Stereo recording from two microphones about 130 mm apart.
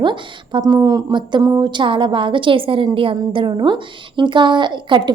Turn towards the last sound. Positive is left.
turn(degrees=-35)  # may be behind; listen again after turning